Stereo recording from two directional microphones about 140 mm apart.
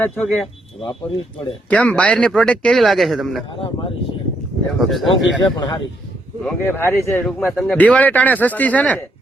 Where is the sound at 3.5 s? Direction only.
35° left (ahead or behind).